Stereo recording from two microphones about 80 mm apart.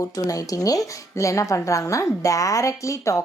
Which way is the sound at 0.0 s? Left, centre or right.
Left.